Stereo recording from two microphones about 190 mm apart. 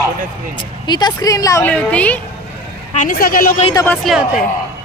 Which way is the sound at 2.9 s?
45° left (ahead or behind).